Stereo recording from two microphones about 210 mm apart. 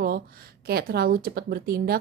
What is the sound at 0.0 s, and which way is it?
Speech, 45° right (ahead or behind).